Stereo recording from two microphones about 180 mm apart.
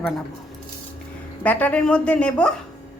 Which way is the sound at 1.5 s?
10° left (ahead or behind).